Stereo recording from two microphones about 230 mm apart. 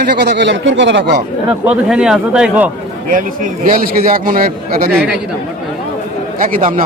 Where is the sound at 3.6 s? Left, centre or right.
Right.